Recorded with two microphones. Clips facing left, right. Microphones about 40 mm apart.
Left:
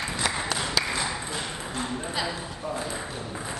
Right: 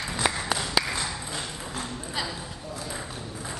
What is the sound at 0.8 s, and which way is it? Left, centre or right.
Ping, centre.